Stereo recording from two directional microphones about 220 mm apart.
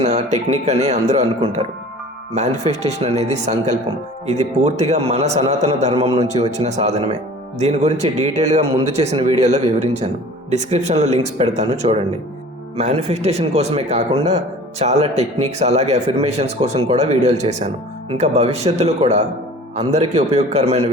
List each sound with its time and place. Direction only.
0.0 s a man's voice: 30° right (ahead or behind)
3.2 s a man's voice: 30° right (ahead or behind)
10.5 s a man's voice: 30° right (ahead or behind)